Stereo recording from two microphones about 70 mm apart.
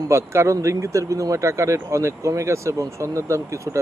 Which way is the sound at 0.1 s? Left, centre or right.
Right.